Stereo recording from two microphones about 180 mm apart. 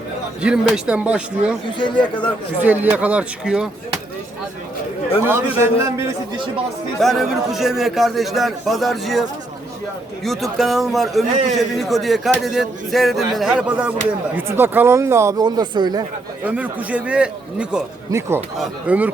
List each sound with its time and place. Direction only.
0.4 s speech: 5° right (ahead or behind)
2.6 s speech: 10° right (ahead or behind)
5.2 s speech: 15° right (ahead or behind)
7.0 s speech: centre (ahead or behind)
10.2 s speech: centre (ahead or behind); by 16.0 s 25° right (ahead or behind)
16.4 s speech: 5° right (ahead or behind)